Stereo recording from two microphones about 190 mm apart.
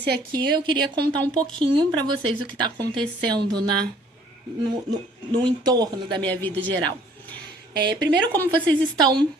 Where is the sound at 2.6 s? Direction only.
25° right (ahead or behind).